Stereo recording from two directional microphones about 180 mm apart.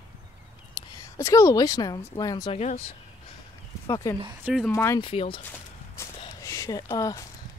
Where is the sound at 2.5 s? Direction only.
40° left (ahead or behind).